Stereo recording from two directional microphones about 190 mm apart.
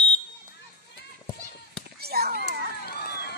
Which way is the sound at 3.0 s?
55° left (ahead or behind).